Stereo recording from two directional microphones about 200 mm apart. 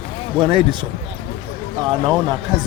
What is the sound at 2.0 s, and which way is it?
Speech, 20° right (ahead or behind).